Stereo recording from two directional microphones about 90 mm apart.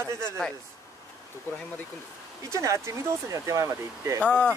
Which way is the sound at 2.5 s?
35° right (ahead or behind).